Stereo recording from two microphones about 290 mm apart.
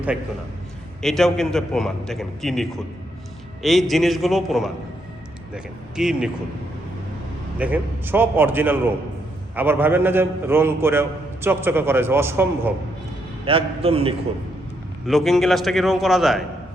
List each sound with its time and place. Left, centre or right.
1.0 s a man's voice: centre
7.6 s a man's voice: centre
13.4 s a man's voice: centre
15.0 s a man's voice: centre